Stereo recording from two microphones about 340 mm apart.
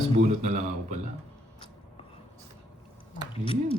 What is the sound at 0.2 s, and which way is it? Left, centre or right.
Speech, centre.